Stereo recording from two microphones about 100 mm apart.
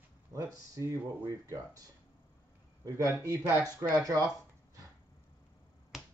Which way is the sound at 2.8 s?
35° right (ahead or behind).